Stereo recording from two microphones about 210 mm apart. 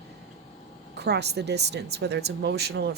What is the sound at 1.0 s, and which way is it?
Speech, 50° right (ahead or behind).